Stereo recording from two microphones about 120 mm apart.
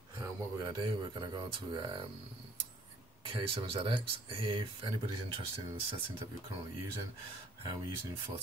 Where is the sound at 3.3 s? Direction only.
50° right (ahead or behind).